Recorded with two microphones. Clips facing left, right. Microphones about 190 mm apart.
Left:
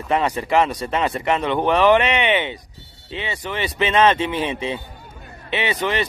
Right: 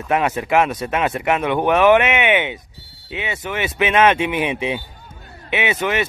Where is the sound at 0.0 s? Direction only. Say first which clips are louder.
Right 1 dB; 5° right (ahead or behind).